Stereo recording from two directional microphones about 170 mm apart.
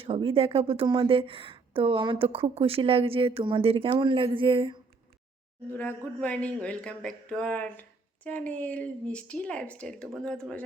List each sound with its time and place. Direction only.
0.0 s a woman's voice: 35° right (ahead or behind)
6.1 s speech: 10° left (ahead or behind)